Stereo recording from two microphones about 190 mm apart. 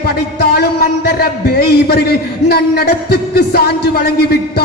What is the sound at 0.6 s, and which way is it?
A man's voice, 55° left (ahead or behind).